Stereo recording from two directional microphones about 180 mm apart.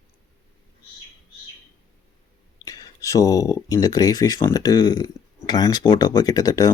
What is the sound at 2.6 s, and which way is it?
Speech, 20° left (ahead or behind).